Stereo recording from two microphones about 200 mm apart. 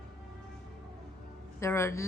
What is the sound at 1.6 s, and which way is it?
Speech, 15° left (ahead or behind).